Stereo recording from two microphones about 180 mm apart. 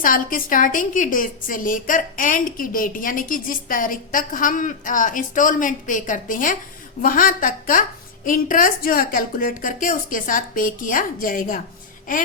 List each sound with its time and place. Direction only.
0.0 s a woman's voice: 50° left (ahead or behind)